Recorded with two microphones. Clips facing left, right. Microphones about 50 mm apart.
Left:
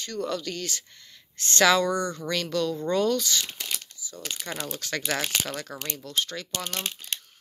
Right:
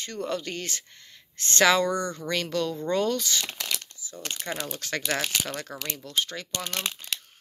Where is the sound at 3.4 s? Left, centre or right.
Right.